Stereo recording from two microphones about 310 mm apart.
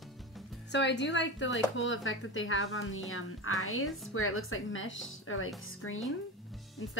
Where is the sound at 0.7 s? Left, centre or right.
Left.